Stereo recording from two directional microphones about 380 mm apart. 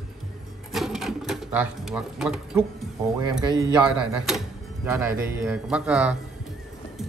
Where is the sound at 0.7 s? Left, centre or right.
Centre.